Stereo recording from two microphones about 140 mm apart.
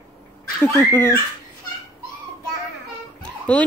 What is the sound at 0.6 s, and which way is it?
Speech, 15° left (ahead or behind).